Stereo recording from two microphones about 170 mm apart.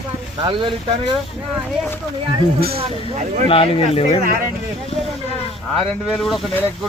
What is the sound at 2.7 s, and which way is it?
Speech, 45° right (ahead or behind).